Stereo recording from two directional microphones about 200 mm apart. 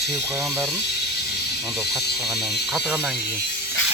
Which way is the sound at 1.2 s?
55° left (ahead or behind).